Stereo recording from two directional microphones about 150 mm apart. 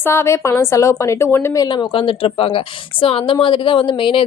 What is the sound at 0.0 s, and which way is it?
A woman's voice, 15° left (ahead or behind).